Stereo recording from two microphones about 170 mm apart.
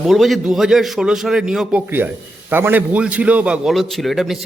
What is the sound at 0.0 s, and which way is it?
A man's voice, centre (ahead or behind).